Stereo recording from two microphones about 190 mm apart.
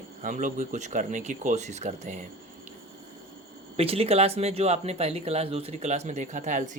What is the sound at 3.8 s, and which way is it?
Speech, 30° right (ahead or behind).